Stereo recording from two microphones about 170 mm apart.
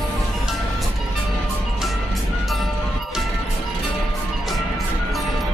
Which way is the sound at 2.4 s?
Centre (ahead or behind).